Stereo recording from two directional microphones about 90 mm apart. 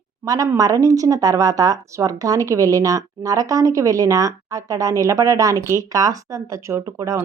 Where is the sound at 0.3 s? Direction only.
40° right (ahead or behind).